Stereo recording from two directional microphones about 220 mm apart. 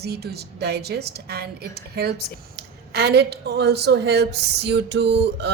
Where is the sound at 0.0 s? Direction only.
45° right (ahead or behind).